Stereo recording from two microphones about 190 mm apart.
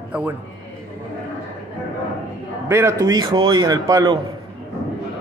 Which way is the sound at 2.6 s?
15° right (ahead or behind).